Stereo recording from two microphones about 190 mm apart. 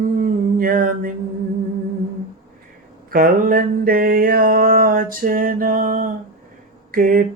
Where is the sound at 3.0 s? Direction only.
50° right (ahead or behind).